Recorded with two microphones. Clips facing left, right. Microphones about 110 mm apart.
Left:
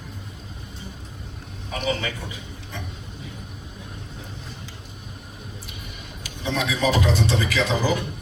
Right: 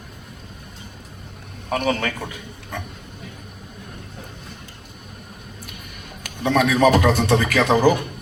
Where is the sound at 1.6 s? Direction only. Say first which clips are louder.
Right 5 dB; 55° right (ahead or behind).